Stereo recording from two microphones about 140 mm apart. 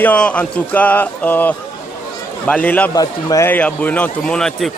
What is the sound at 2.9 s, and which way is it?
Speech, 25° left (ahead or behind).